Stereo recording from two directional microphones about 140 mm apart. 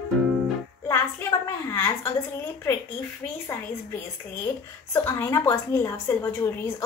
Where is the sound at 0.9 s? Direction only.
20° left (ahead or behind).